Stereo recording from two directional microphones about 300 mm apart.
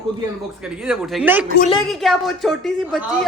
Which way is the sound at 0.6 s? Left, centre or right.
Centre.